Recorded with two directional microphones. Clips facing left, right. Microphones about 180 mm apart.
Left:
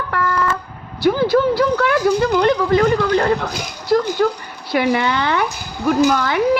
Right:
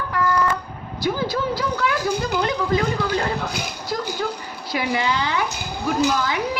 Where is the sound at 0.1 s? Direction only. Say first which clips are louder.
Left 2 dB; 65° left (ahead or behind).